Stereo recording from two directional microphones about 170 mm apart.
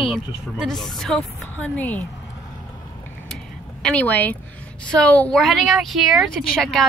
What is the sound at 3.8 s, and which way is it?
A woman's voice, 10° left (ahead or behind).